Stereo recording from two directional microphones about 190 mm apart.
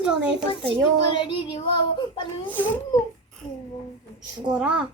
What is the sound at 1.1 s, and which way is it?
Speech, 25° left (ahead or behind).